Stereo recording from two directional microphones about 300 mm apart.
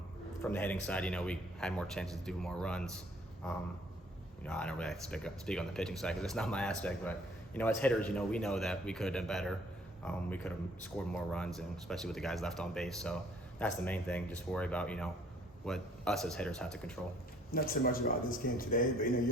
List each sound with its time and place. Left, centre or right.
0.5 s speech: centre
17.5 s a man's voice: left